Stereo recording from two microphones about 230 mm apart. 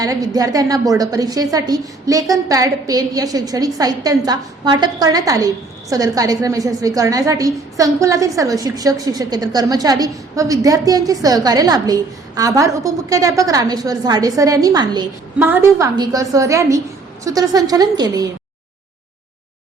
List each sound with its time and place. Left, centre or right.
0.0 s a woman's voice: centre